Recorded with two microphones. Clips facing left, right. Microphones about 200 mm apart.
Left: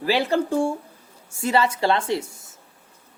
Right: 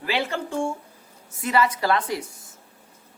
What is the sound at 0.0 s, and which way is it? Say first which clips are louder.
A woman's voice: left 6 dB; 35° left (ahead or behind).